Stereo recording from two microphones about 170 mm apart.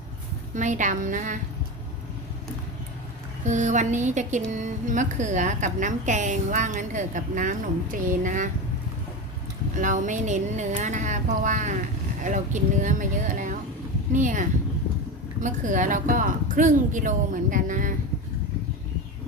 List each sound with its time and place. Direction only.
0.5 s speech: 45° right (ahead or behind)
3.4 s speech: 45° right (ahead or behind)
9.7 s speech: 50° right (ahead or behind)